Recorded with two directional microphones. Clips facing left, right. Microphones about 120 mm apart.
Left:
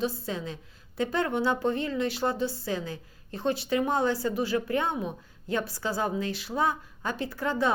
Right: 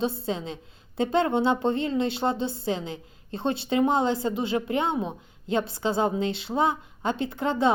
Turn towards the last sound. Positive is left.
turn(degrees=-25)  # may be behind; listen again after turning